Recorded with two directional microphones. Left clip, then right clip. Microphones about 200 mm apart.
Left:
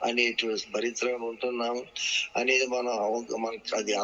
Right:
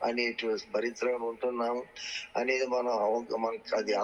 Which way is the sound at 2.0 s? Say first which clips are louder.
Left 10 dB; 10° right (ahead or behind).